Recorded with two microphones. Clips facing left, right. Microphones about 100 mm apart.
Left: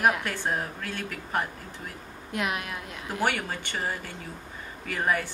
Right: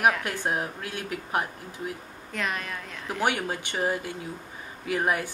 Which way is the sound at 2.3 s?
10° left (ahead or behind).